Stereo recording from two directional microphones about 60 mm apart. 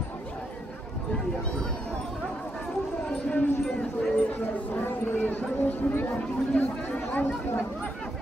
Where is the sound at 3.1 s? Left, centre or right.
Centre.